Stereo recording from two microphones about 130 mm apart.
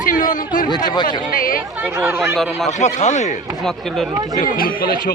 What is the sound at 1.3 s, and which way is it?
Speech, 90° left.